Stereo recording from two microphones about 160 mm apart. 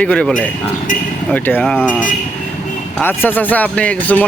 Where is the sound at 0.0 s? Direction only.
5° left (ahead or behind).